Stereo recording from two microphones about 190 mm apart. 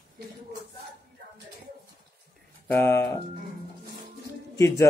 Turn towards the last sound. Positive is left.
turn(degrees=15)  # may be behind; listen again after turning